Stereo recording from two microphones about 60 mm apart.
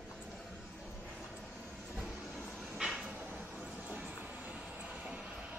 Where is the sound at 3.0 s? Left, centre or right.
Right.